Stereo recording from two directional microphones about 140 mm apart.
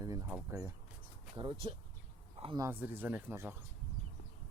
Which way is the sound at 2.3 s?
40° right (ahead or behind).